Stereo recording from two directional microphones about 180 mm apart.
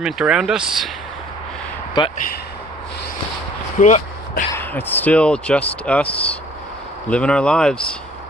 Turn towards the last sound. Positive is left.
turn(degrees=5)  # may be behind; listen again after turning